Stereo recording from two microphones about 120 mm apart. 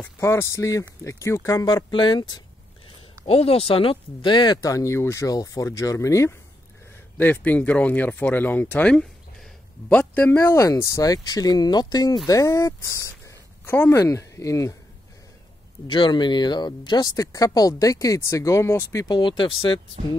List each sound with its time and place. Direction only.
0.2 s speech: 25° left (ahead or behind)
1.9 s speech: 40° left (ahead or behind)
3.3 s speech: 55° left (ahead or behind); by 14.8 s 25° left (ahead or behind)
15.9 s speech: 40° left (ahead or behind); by 19.0 s 25° left (ahead or behind)
19.0 s speech: 40° left (ahead or behind)